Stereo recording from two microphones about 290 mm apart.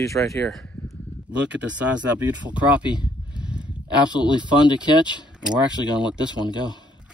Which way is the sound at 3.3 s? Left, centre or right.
Centre.